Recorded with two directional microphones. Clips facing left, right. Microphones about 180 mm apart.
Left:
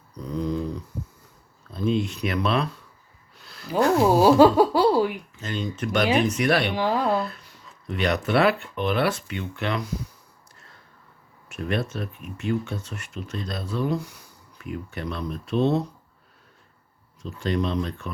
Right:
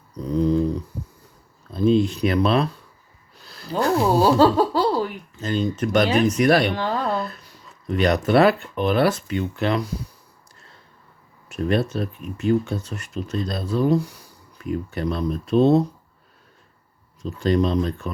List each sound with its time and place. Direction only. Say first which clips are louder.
1.7 s speech: right 6 dB; 35° right (ahead or behind)
3.3 s a sound: right 2 dB; 35° right (ahead or behind)
4.0 s speech: left 1 dB; 15° left (ahead or behind)
5.4 s speech: right 7 dB; 35° right (ahead or behind)
6.7 s speech: left 1 dB; 10° left (ahead or behind)
7.3 s speech: right 1 dB; 40° right (ahead or behind)
11.4 s speech: right 6 dB; 35° right (ahead or behind)
17.2 s speech: right 6 dB; 40° right (ahead or behind)